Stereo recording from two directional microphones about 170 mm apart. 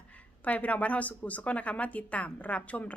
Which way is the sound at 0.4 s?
10° left (ahead or behind).